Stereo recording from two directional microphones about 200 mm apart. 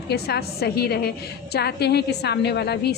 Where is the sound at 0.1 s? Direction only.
55° left (ahead or behind).